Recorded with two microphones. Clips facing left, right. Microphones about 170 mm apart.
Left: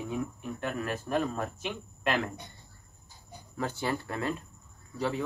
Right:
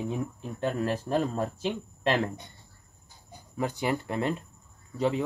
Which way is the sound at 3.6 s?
15° right (ahead or behind).